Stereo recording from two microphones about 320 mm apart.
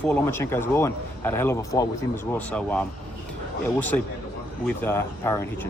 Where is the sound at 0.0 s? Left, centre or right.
Centre.